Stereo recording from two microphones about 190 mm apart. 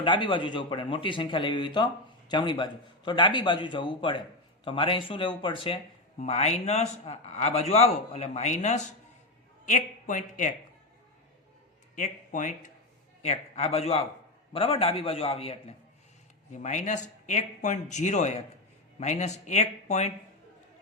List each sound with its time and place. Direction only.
0.0 s speech: 25° left (ahead or behind); by 10.5 s 40° left (ahead or behind)
11.9 s speech: 40° left (ahead or behind)